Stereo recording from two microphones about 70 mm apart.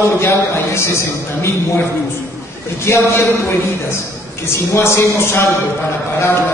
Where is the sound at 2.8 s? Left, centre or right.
Left.